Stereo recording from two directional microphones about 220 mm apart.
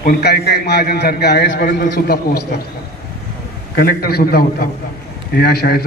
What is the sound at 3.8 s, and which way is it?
A man's voice, 45° left (ahead or behind).